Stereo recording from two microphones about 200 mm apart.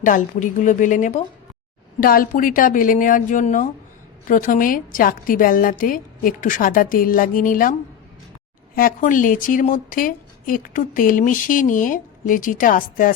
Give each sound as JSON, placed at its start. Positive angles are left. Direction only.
{"t": 0.0, "sound": "a woman's voice", "side_deg": 40}